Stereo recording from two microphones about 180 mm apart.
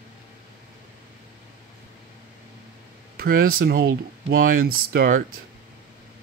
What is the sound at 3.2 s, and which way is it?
Speech, 55° right (ahead or behind).